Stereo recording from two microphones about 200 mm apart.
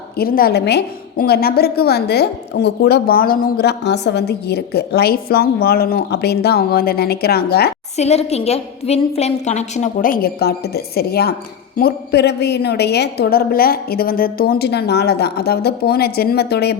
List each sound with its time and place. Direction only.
0.2 s a woman's voice: 50° left (ahead or behind)
7.9 s a woman's voice: 30° left (ahead or behind); by 16.7 s 55° left (ahead or behind)